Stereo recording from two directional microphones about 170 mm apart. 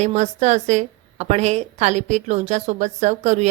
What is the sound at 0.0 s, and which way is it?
A woman's voice, 40° right (ahead or behind).